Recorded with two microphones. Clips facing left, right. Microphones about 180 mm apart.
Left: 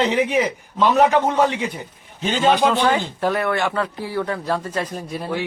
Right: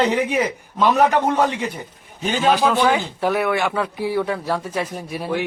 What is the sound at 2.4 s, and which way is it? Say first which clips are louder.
Speech: even; centre (ahead or behind).